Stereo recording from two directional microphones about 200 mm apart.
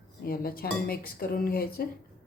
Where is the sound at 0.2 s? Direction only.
50° left (ahead or behind).